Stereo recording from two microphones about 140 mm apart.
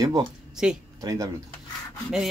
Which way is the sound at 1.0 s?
25° right (ahead or behind).